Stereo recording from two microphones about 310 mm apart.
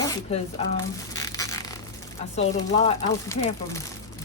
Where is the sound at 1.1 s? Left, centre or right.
Centre.